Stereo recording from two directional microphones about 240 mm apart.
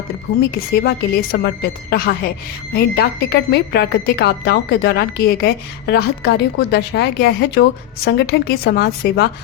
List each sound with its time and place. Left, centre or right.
0.7 s a woman's voice: left